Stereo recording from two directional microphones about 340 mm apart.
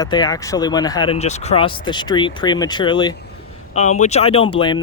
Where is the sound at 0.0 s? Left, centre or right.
Centre.